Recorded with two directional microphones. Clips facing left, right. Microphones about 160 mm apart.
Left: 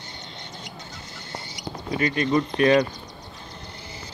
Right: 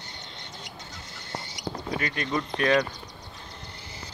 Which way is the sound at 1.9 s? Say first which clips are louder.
Left 8 dB; centre (ahead or behind).